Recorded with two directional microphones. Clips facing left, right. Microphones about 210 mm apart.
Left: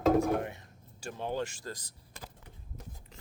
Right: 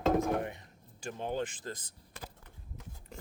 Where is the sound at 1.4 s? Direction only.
20° right (ahead or behind).